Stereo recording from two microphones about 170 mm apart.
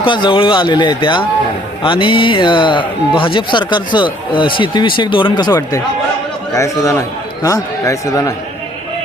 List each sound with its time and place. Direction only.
0.0 s a man's voice: 30° left (ahead or behind)